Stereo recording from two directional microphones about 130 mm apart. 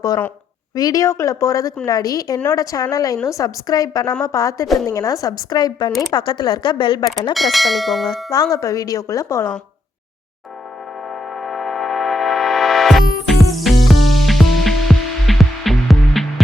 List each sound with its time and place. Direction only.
0.8 s a woman's voice: 30° left (ahead or behind)
7.3 s bell: centre (ahead or behind)
8.3 s a woman's voice: 25° left (ahead or behind)
11.1 s music: centre (ahead or behind)